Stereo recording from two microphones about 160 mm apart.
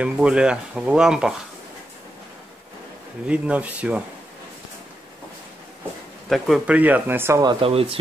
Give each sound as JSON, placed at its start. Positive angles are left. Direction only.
{"t": 0.0, "sound": "speech", "side_deg": -5}
{"t": 3.3, "sound": "speech", "side_deg": -10}
{"t": 6.2, "sound": "speech", "side_deg": 0}
{"t": 7.4, "sound": "speech", "side_deg": -35}